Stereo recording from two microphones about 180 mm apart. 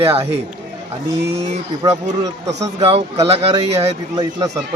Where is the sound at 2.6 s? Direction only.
35° right (ahead or behind).